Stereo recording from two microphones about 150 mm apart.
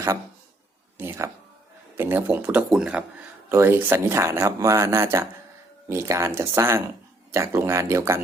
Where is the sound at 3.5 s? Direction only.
15° right (ahead or behind).